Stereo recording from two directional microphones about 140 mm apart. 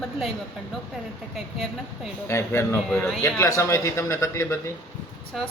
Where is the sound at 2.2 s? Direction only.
15° left (ahead or behind).